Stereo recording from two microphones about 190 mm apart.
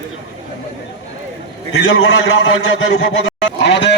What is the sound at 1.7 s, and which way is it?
A man's voice, 85° left.